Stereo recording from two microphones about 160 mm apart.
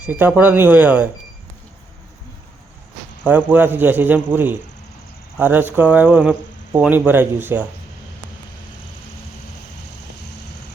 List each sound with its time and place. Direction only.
0.0 s speech: 10° right (ahead or behind)
3.2 s speech: 10° right (ahead or behind)